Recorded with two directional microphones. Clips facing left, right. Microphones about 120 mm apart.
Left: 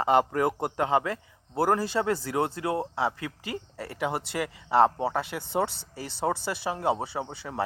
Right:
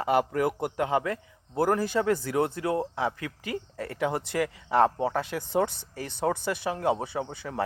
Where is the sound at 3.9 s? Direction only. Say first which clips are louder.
Right 2 dB; 20° left (ahead or behind).